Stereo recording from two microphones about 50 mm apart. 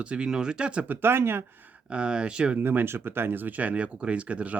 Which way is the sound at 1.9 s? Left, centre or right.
Right.